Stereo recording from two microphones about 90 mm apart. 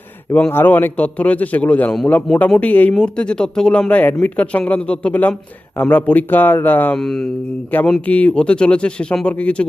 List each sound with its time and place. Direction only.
0.5 s speech: 20° left (ahead or behind)
6.9 s speech: 5° left (ahead or behind)
8.0 s speech: 15° left (ahead or behind)